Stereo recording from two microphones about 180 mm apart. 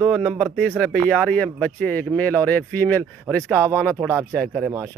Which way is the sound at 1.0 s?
5° left (ahead or behind).